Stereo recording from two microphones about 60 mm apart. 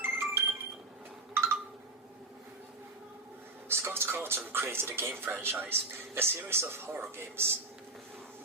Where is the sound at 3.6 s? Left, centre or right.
Right.